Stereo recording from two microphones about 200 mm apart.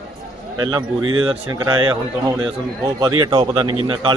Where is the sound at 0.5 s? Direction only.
20° right (ahead or behind).